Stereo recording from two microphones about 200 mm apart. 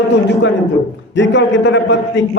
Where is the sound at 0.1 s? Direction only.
60° left (ahead or behind).